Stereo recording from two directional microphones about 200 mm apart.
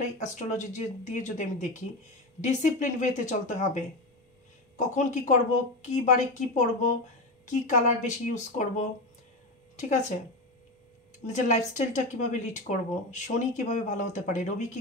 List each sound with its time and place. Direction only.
0.2 s speech: 35° left (ahead or behind)
6.5 s speech: 35° left (ahead or behind)
11.2 s speech: 35° left (ahead or behind)